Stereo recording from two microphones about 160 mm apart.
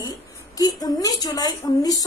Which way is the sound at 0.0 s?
25° left (ahead or behind).